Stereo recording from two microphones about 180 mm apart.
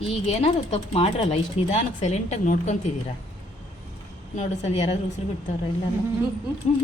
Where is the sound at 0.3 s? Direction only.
35° left (ahead or behind).